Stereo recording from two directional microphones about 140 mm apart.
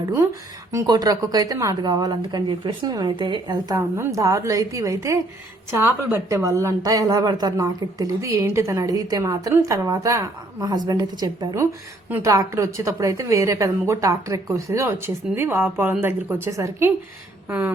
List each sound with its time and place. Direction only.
0.7 s a woman's voice: 25° right (ahead or behind)
3.8 s a woman's voice: 20° right (ahead or behind)
17.5 s a sound: 10° right (ahead or behind)